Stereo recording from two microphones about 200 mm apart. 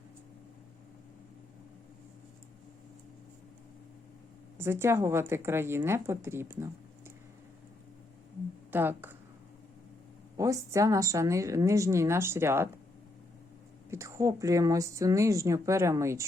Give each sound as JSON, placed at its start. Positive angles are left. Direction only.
{"t": 4.5, "sound": "a woman's voice", "side_deg": -10}
{"t": 8.7, "sound": "a woman's voice", "side_deg": -10}
{"t": 10.3, "sound": "a woman's voice", "side_deg": -15}
{"t": 13.9, "sound": "a woman's voice", "side_deg": -15}